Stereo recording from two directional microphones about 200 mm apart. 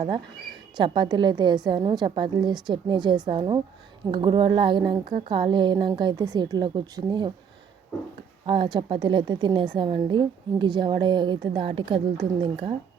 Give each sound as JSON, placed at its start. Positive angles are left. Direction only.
{"t": 0.8, "sound": "a woman's voice", "side_deg": -20}
{"t": 8.4, "sound": "a woman's voice", "side_deg": -25}